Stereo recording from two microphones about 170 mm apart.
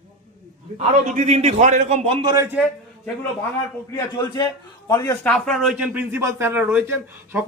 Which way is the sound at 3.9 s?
25° left (ahead or behind).